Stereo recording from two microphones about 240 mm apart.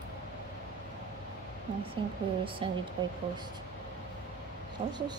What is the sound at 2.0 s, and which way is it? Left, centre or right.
A woman's voice, centre.